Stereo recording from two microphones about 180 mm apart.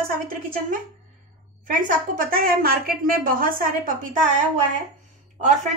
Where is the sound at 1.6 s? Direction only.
50° right (ahead or behind).